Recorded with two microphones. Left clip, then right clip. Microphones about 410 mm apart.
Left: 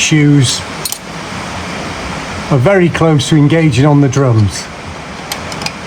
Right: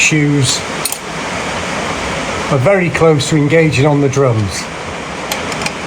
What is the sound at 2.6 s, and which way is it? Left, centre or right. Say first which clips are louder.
Speech: even; centre.